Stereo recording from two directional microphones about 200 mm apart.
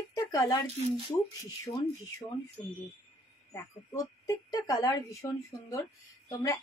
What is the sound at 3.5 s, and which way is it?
A woman's voice, 15° left (ahead or behind).